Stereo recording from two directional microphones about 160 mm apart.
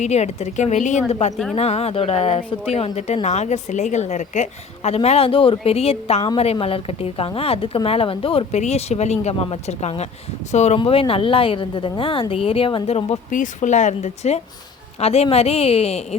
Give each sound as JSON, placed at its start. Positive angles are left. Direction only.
{"t": 0.0, "sound": "a woman's voice", "side_deg": 45}
{"t": 10.8, "sound": "a woman's voice", "side_deg": 35}